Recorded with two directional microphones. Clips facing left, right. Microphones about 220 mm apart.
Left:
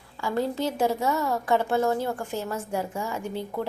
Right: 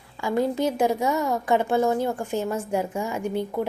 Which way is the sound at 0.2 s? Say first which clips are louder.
Right 3 dB; 15° right (ahead or behind).